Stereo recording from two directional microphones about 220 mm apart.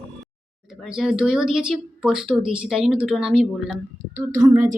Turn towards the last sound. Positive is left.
turn(degrees=-10)  # may be behind; listen again after turning